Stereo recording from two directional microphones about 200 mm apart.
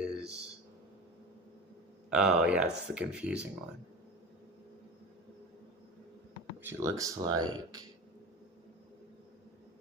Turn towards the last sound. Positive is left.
turn(degrees=-20)  # may be behind; listen again after turning